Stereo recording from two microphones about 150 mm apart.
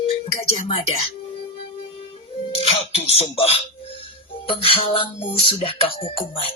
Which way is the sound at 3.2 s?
40° left (ahead or behind).